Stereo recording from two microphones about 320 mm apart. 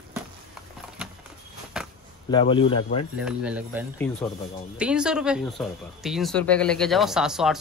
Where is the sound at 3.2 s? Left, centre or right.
Centre.